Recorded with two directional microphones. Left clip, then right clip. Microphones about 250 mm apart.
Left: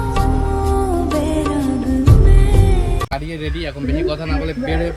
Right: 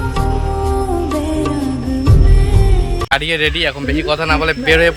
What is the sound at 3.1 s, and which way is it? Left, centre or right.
Speech, right.